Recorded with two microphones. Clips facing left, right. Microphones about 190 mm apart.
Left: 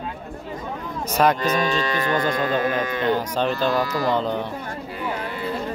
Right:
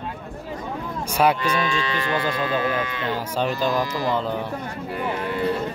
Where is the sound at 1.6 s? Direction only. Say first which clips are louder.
Left 2 dB; 45° left (ahead or behind).